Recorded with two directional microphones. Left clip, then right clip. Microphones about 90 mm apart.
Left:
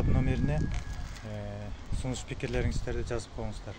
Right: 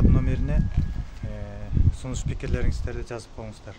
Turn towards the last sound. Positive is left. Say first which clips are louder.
# even
turn(degrees=-20)  # may be behind; listen again after turning